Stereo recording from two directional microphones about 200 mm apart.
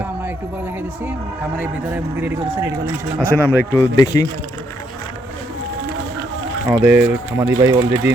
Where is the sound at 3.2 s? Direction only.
10° left (ahead or behind).